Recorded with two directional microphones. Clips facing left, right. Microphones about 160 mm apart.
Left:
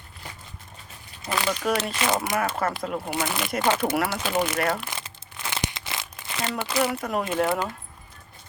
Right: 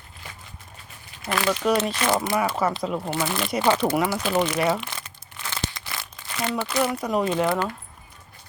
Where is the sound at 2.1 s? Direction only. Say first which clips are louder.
Right 3 dB; 15° left (ahead or behind).